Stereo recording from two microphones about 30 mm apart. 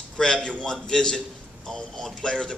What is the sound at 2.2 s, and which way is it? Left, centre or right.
Speech, left.